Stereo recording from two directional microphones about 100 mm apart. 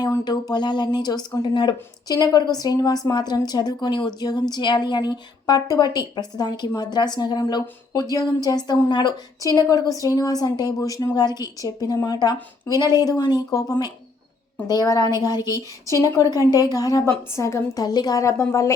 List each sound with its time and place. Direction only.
0.3 s a woman's voice: 45° left (ahead or behind)
9.6 s a woman's voice: 35° left (ahead or behind)
17.7 s a woman's voice: 45° left (ahead or behind)